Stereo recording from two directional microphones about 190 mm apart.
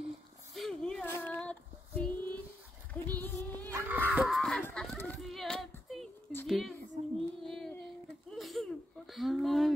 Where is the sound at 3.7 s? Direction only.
10° right (ahead or behind).